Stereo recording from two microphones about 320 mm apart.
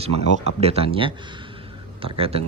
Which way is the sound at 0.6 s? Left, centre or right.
Centre.